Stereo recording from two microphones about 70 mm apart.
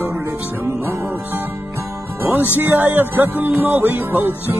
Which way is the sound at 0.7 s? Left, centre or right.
Right.